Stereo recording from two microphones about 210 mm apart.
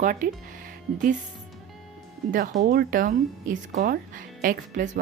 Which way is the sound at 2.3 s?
40° right (ahead or behind).